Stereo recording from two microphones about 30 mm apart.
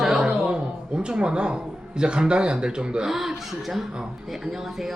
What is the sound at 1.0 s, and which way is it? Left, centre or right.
A man's voice, right.